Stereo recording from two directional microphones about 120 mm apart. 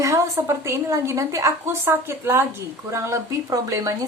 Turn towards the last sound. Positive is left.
turn(degrees=-25)  # may be behind; listen again after turning